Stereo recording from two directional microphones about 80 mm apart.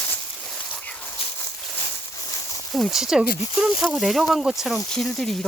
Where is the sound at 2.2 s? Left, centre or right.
Left.